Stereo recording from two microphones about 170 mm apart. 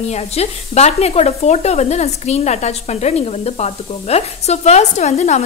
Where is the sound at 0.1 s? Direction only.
40° left (ahead or behind).